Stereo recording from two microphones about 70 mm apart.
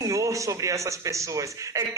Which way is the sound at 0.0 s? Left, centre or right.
Right.